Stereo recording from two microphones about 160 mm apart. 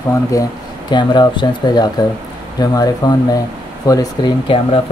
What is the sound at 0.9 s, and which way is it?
Speech, 30° left (ahead or behind).